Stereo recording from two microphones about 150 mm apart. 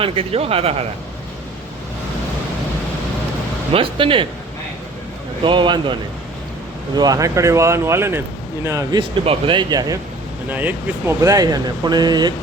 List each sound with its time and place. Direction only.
0.0 s speech: 40° right (ahead or behind)
3.7 s speech: 35° right (ahead or behind)
5.4 s speech: 35° right (ahead or behind)
9.2 s speech: 35° right (ahead or behind)
10.5 s speech: 10° right (ahead or behind)
11.2 s speech: 25° right (ahead or behind)